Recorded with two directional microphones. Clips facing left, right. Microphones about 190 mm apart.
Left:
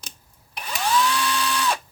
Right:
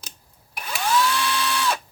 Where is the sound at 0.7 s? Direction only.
5° right (ahead or behind).